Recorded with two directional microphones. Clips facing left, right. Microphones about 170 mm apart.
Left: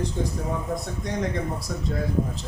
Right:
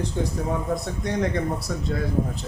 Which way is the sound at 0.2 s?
70° right (ahead or behind).